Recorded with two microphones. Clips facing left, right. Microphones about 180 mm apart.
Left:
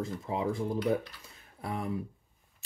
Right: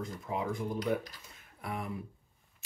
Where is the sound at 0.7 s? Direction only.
40° right (ahead or behind).